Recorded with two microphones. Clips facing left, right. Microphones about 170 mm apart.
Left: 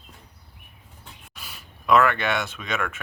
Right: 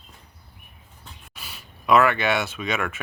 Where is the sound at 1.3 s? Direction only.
5° right (ahead or behind).